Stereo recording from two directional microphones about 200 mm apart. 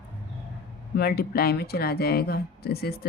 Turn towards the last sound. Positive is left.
turn(degrees=50)  # may be behind; listen again after turning